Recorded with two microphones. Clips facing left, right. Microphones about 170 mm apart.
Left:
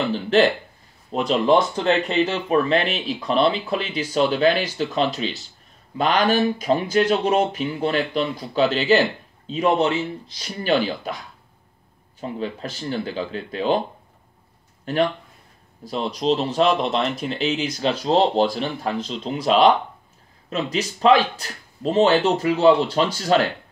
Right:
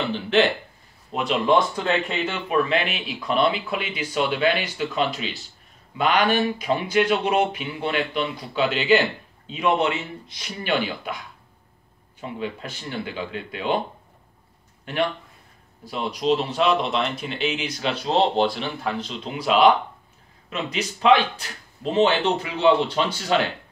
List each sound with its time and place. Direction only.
0.1 s speech: 40° left (ahead or behind)
15.8 s speech: 40° left (ahead or behind)